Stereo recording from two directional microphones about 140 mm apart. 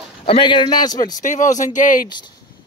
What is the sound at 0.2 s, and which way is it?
Speech, 40° left (ahead or behind).